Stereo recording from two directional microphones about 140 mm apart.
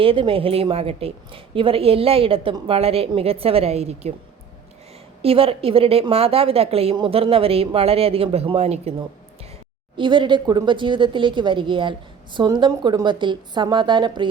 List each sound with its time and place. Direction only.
0.0 s a woman's voice: 40° right (ahead or behind)
5.2 s a woman's voice: 45° right (ahead or behind)
10.0 s a woman's voice: 35° right (ahead or behind)